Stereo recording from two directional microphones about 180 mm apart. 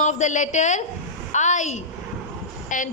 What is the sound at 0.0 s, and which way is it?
A woman's voice, 40° left (ahead or behind).